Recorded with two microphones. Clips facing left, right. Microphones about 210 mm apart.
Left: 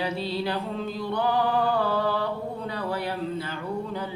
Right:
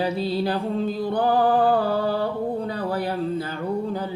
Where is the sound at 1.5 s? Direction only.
50° right (ahead or behind).